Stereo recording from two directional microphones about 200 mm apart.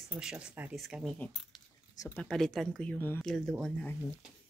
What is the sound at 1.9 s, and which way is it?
Speech, 15° left (ahead or behind).